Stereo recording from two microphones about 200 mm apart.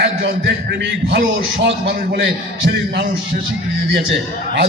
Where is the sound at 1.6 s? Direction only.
60° right (ahead or behind).